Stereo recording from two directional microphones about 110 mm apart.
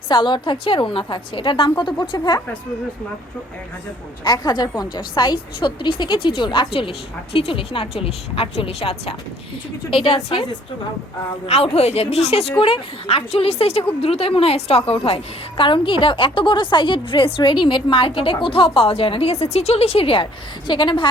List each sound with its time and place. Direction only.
0.1 s a woman's voice: 45° left (ahead or behind)
4.2 s a woman's voice: 40° left (ahead or behind); by 10.4 s 55° left (ahead or behind)
11.4 s speech: 65° left (ahead or behind)
12.5 s a woman's voice: 55° left (ahead or behind)
20.7 s a woman's voice: 45° left (ahead or behind)